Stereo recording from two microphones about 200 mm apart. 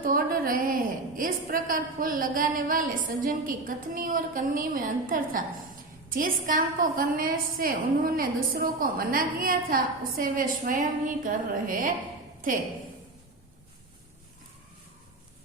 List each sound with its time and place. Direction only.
0.0 s a woman's voice: 45° right (ahead or behind)